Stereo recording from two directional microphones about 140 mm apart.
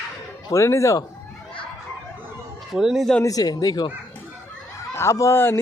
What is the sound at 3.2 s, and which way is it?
Speech, 25° left (ahead or behind).